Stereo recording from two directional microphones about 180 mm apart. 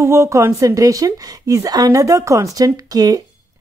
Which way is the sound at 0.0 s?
15° right (ahead or behind).